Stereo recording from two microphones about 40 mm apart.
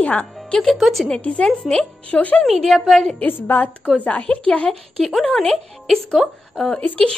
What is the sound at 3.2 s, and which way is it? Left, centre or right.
Speech, left.